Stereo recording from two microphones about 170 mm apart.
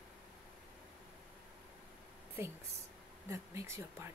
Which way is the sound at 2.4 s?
15° right (ahead or behind).